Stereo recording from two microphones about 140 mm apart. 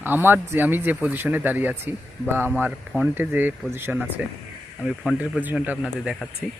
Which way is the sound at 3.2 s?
15° right (ahead or behind).